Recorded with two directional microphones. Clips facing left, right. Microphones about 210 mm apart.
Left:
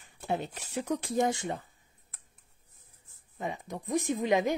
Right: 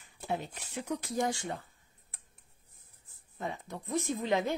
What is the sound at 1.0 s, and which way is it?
Speech, 20° left (ahead or behind).